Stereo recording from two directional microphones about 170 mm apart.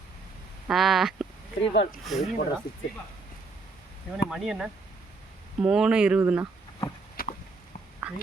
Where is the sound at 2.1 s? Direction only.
Centre (ahead or behind).